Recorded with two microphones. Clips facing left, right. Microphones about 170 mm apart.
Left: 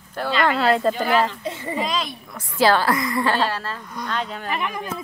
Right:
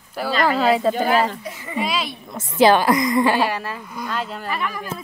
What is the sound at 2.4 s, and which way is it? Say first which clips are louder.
A woman's voice: right 4 dB; 20° right (ahead or behind).